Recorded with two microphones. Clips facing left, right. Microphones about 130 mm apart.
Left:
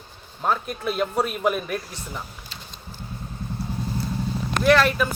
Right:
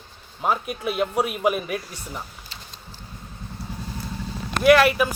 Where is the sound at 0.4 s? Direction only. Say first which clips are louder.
Even; 10° right (ahead or behind).